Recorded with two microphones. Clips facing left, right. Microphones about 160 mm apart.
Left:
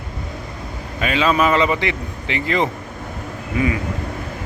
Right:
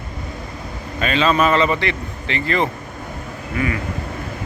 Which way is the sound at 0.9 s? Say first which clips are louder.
Even; 10° left (ahead or behind).